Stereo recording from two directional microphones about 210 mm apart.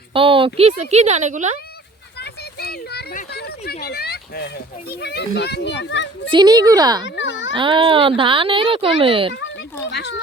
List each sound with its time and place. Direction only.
0.1 s speech: 25° right (ahead or behind)
2.1 s a sound: 50° left (ahead or behind)
3.7 s a child's voice: 50° left (ahead or behind)
6.3 s speech: 20° right (ahead or behind)
7.0 s speech: 60° left (ahead or behind)
7.5 s speech: 25° right (ahead or behind)
9.9 s a child's voice: 50° left (ahead or behind)